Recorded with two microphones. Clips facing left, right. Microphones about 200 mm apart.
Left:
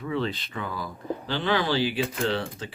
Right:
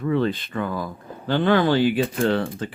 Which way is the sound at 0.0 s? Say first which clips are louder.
Right 7 dB; 50° right (ahead or behind).